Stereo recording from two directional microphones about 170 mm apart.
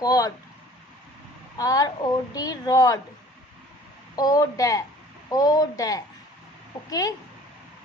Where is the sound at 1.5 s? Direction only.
20° left (ahead or behind).